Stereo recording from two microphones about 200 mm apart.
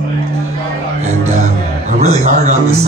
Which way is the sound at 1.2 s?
35° right (ahead or behind).